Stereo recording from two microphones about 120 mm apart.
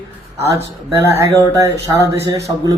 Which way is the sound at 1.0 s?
25° right (ahead or behind).